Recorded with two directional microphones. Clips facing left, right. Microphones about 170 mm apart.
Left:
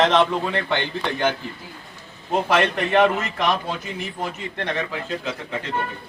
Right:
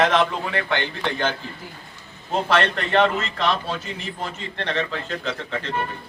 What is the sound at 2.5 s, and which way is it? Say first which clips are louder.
Speech: left 1 dB; 15° left (ahead or behind).